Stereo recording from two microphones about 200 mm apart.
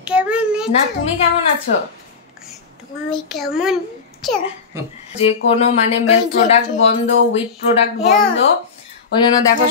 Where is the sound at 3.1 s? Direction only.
Centre (ahead or behind).